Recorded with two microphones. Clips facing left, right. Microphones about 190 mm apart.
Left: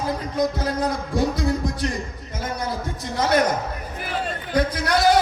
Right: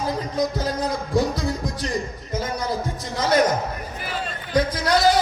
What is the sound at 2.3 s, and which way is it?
A man's voice, 55° left (ahead or behind).